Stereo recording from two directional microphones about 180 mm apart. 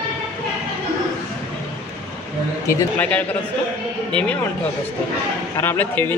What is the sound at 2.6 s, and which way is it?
Speech, 10° left (ahead or behind).